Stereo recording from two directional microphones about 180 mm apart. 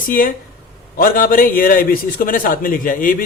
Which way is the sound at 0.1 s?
50° left (ahead or behind).